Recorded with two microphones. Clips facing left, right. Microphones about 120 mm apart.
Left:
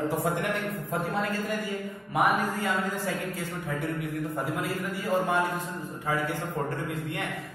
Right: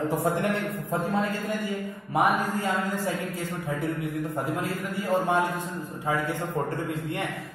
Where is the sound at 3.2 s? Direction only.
30° right (ahead or behind).